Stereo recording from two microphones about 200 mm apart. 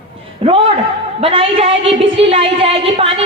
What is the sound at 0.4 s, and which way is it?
A woman's voice, 30° right (ahead or behind).